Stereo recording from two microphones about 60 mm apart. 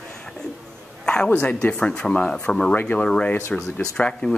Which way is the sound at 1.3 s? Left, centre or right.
Left.